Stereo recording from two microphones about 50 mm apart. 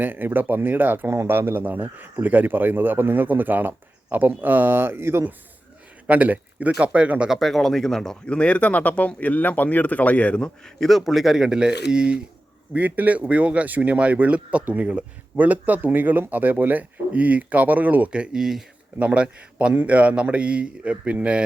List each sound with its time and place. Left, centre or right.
0.0 s speech: right
1.0 s speech: right
6.1 s speech: right
7.3 s speech: centre; by 10.5 s left
10.8 s speech: centre
12.7 s speech: right
18.1 s speech: centre
18.9 s speech: right